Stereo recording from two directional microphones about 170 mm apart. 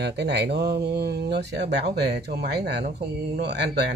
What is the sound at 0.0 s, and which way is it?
Speech, 85° right.